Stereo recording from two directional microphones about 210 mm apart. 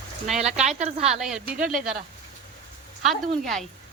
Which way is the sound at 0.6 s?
30° right (ahead or behind).